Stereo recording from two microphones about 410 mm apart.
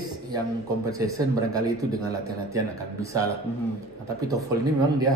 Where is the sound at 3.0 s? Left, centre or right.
Centre.